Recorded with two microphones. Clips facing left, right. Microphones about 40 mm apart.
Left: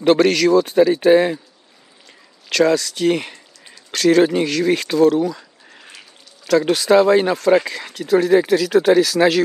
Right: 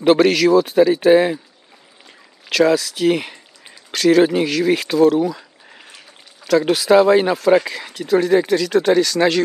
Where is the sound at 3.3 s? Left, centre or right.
Centre.